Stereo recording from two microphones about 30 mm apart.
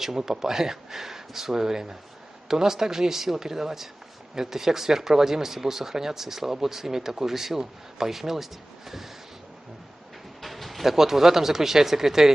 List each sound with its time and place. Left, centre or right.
0.0 s speech: centre
10.4 s speech: centre